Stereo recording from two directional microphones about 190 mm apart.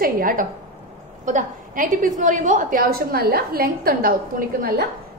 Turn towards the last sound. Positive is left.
turn(degrees=-50)  # may be behind; listen again after turning